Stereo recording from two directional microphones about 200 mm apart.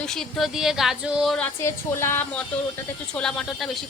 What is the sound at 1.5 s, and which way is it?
Speech, 15° left (ahead or behind).